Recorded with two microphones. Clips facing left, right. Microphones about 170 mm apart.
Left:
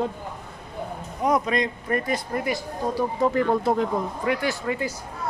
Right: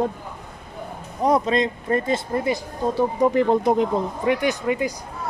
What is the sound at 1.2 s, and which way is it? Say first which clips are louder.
Speech: right 3 dB; 30° right (ahead or behind).